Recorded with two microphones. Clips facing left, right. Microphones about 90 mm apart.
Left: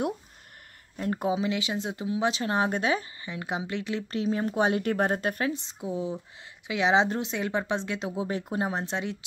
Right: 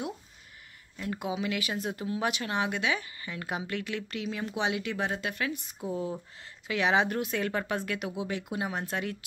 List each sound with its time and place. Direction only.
0.9 s speech: 40° left (ahead or behind)
3.2 s speech: 20° left (ahead or behind); by 5.5 s 40° left (ahead or behind)
5.5 s speech: 25° left (ahead or behind)